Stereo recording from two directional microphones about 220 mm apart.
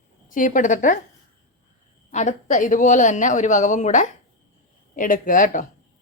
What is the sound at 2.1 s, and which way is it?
A woman's voice, 35° left (ahead or behind).